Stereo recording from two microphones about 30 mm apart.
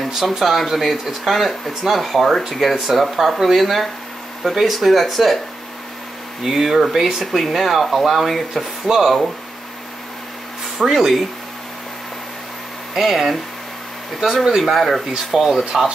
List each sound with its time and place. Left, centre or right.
0.5 s speech: centre
6.4 s speech: centre
8.0 s speech: centre
8.3 s speech: centre
8.8 s speech: centre
10.9 s speech: centre
12.9 s speech: centre
14.2 s speech: right
14.6 s speech: centre
15.3 s speech: centre